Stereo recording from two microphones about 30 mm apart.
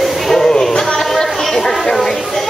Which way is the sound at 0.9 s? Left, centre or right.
Centre.